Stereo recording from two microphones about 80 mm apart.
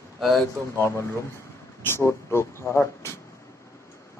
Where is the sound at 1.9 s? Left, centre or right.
Left.